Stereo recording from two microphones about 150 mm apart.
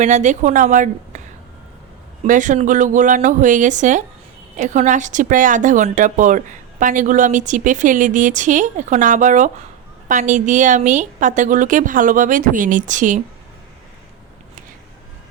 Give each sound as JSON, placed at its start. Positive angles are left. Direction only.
{"t": 0.0, "sound": "a woman's voice", "side_deg": -55}
{"t": 2.2, "sound": "a woman's voice", "side_deg": -55}